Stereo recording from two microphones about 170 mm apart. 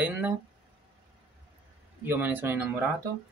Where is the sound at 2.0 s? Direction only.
10° right (ahead or behind).